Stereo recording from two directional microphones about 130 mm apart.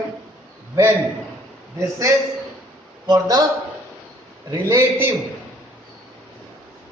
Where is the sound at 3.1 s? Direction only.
30° right (ahead or behind).